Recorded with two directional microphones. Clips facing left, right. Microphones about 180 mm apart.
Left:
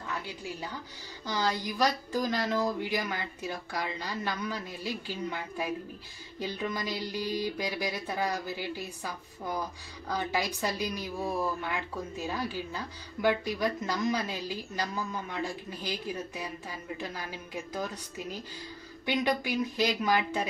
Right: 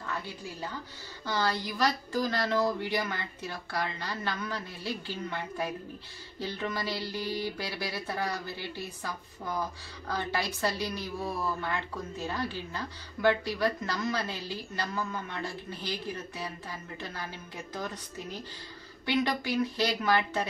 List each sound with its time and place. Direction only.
0.0 s a woman's voice: 15° left (ahead or behind)
10.0 s a woman's voice: 15° left (ahead or behind)
19.0 s a woman's voice: 15° left (ahead or behind)